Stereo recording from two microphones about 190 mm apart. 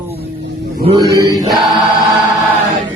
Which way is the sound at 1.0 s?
15° left (ahead or behind).